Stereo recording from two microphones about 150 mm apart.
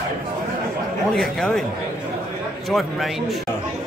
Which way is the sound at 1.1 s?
Centre (ahead or behind).